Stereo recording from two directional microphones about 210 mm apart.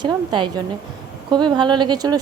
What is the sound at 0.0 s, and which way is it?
A woman's voice, 20° right (ahead or behind).